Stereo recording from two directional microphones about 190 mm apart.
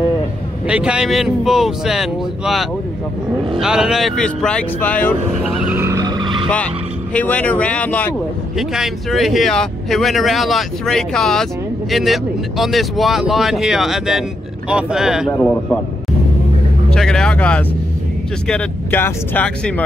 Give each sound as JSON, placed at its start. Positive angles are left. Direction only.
{"t": 0.7, "sound": "speech", "side_deg": -5}
{"t": 5.4, "sound": "vehicle", "side_deg": -5}
{"t": 7.2, "sound": "speech", "side_deg": 5}
{"t": 15.3, "sound": "speech", "side_deg": 10}
{"t": 16.9, "sound": "speech", "side_deg": 5}